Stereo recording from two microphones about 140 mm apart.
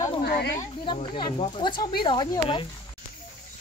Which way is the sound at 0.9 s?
35° left (ahead or behind).